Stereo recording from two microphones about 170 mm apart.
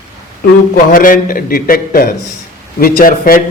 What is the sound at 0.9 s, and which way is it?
A man's voice, 55° left (ahead or behind).